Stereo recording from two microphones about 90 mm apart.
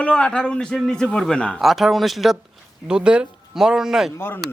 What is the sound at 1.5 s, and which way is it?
Speech, 5° right (ahead or behind).